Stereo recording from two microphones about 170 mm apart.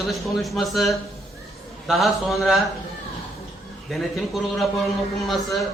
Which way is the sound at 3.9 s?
Centre (ahead or behind).